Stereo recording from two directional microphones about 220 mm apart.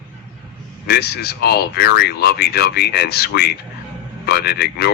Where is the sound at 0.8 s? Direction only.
45° left (ahead or behind).